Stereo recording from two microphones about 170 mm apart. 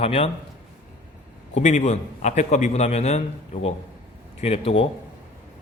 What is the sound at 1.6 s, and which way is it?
A man's voice, 45° left (ahead or behind).